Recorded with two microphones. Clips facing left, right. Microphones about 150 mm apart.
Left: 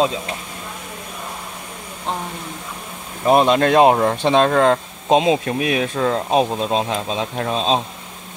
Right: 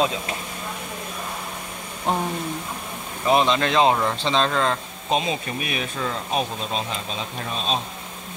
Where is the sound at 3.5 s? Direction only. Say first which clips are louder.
Left 6 dB; 50° left (ahead or behind).